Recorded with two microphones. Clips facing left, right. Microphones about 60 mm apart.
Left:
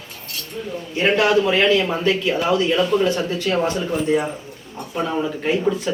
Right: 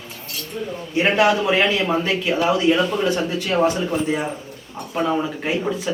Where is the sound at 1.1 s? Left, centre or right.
Right.